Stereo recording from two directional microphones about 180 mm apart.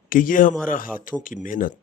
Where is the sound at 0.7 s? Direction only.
50° left (ahead or behind).